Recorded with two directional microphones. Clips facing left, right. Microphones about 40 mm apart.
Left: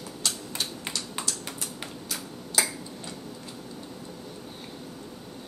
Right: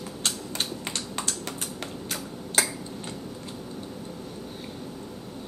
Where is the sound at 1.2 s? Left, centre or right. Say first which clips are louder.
Right 2 dB; centre.